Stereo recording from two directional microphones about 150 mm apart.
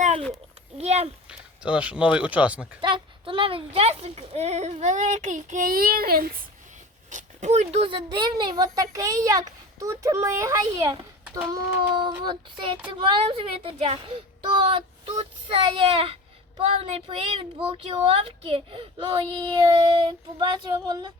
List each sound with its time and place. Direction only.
0.8 s speech: 45° right (ahead or behind)
1.3 s speech: 5° right (ahead or behind)
2.8 s speech: 35° right (ahead or behind); by 6.3 s 90° right
7.1 s speech: 55° right (ahead or behind); by 21.1 s 30° right (ahead or behind)